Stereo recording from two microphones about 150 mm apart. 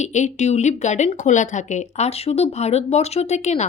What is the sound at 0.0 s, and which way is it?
A woman's voice, 50° left (ahead or behind).